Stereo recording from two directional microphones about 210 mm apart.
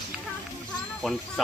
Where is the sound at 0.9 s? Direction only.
Centre (ahead or behind).